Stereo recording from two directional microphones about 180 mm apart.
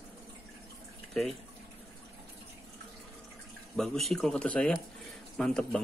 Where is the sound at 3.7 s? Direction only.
Centre (ahead or behind).